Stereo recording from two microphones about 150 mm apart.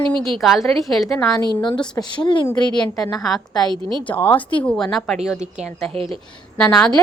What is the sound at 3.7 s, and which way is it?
Speech, 30° right (ahead or behind).